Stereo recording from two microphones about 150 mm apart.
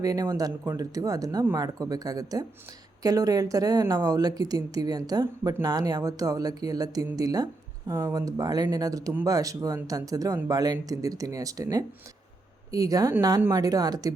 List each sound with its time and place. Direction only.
0.0 s speech: 25° right (ahead or behind)